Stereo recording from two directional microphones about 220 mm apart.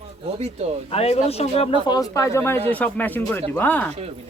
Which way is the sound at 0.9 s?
30° left (ahead or behind).